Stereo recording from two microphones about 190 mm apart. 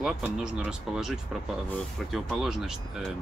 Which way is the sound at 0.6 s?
5° right (ahead or behind).